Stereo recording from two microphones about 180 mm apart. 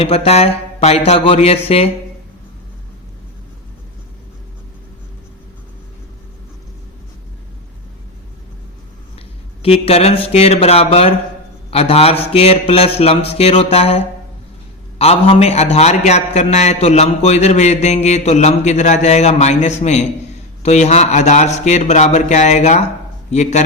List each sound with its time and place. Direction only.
0.0 s a man's voice: 35° left (ahead or behind)
9.6 s a man's voice: 35° left (ahead or behind)